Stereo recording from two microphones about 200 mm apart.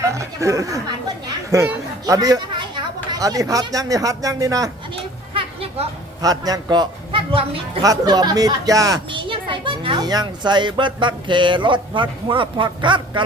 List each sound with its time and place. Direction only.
0.0 s speech: 15° right (ahead or behind)
5.3 s a sound: 25° right (ahead or behind)
6.2 s speech: 20° right (ahead or behind)